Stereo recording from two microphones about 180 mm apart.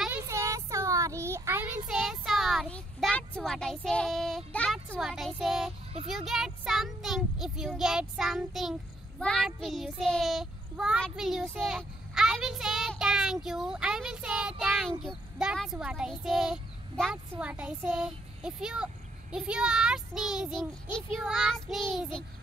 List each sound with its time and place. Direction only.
0.0 s child singing: 10° right (ahead or behind)
2.0 s a child's voice: centre (ahead or behind)